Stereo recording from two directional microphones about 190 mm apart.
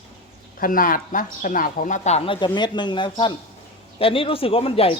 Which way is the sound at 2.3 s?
25° left (ahead or behind).